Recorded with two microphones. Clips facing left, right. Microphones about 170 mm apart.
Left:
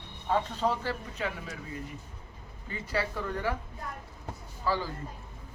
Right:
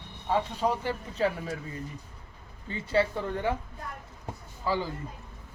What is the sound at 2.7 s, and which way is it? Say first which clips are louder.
Speech: right 6 dB; 25° right (ahead or behind).